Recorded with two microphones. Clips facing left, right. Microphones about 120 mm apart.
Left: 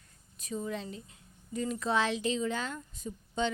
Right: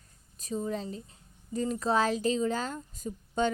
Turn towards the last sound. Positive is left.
turn(degrees=-45)  # may be behind; listen again after turning